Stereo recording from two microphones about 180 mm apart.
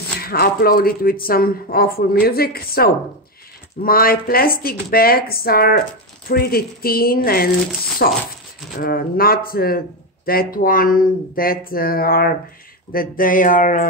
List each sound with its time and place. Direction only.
0.2 s speech: 55° left (ahead or behind)